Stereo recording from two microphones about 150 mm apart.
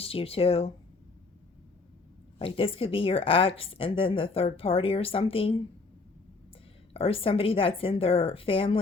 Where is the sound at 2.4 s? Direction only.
35° left (ahead or behind).